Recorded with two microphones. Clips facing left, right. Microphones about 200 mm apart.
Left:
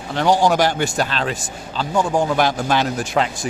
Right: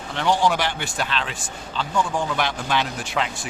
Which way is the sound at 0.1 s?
40° left (ahead or behind).